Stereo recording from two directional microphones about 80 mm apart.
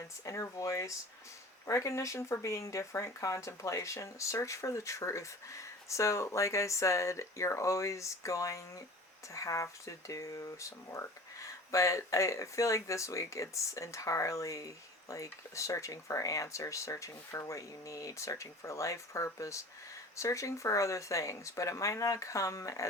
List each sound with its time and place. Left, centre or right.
0.3 s speech: left